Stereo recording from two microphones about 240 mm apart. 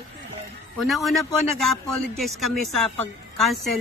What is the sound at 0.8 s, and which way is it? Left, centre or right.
A woman's voice, centre.